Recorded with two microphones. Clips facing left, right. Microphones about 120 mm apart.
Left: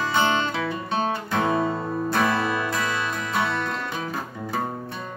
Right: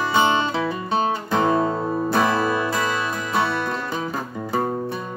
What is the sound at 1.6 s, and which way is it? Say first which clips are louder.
Guitar: right 3 dB; 15° right (ahead or behind).